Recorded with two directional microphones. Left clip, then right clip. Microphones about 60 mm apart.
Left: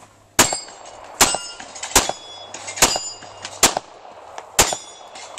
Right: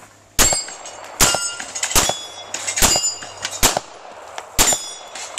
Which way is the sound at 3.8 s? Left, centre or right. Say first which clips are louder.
Right 3 dB; centre.